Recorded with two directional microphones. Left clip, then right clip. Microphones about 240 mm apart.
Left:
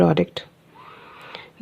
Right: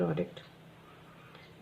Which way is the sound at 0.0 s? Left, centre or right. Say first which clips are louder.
Left 14 dB; left.